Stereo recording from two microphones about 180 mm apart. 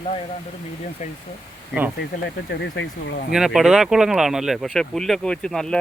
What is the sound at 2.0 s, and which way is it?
Speech, 70° left (ahead or behind).